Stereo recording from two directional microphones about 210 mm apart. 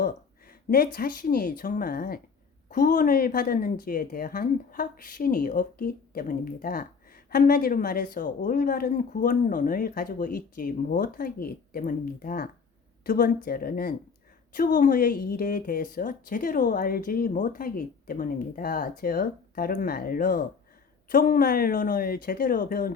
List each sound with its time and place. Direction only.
0.9 s a woman's voice: 45° left (ahead or behind)